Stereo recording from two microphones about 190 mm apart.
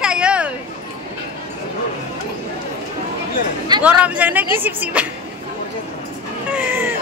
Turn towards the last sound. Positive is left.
turn(degrees=-10)  # may be behind; listen again after turning